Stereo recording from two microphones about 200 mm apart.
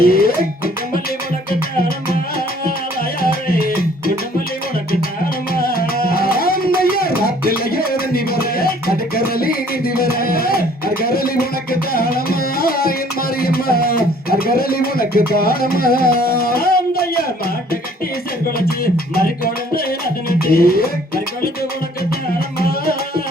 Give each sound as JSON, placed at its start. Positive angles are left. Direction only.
{"t": 0.0, "sound": "music", "side_deg": 50}
{"t": 3.2, "sound": "music", "side_deg": 50}
{"t": 5.5, "sound": "music", "side_deg": 45}
{"t": 13.4, "sound": "a sound", "side_deg": 50}
{"t": 20.4, "sound": "speech", "side_deg": 50}